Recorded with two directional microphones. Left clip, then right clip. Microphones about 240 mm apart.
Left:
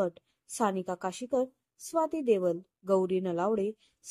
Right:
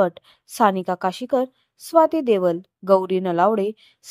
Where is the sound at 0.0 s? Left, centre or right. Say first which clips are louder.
Right 12 dB; centre.